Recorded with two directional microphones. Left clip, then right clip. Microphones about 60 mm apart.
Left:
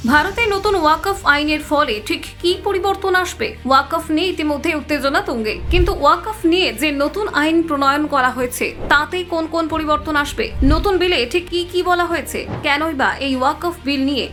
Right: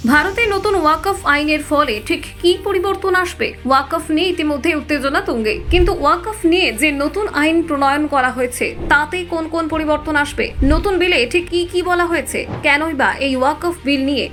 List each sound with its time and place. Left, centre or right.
0.0 s a woman's voice: right; by 5.2 s centre
5.2 s a woman's voice: right
8.4 s a woman's voice: centre
9.0 s a woman's voice: right